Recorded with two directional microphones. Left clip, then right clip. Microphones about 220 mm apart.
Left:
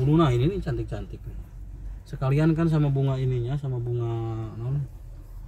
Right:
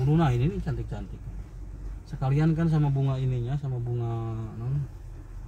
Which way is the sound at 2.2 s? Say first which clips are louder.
Left 4 dB; 35° left (ahead or behind).